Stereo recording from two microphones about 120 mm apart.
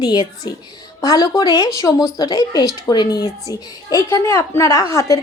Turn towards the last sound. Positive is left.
turn(degrees=30)  # may be behind; listen again after turning